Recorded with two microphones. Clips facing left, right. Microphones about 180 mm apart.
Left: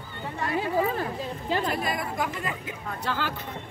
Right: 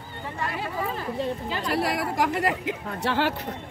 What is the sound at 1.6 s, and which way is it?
Speech, 80° right.